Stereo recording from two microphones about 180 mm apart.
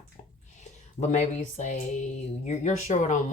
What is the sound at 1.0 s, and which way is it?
Speech, 40° left (ahead or behind).